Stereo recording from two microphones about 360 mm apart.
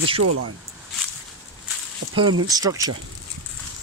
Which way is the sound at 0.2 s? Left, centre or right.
Right.